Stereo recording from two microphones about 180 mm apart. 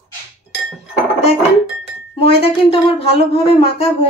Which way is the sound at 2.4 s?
35° left (ahead or behind).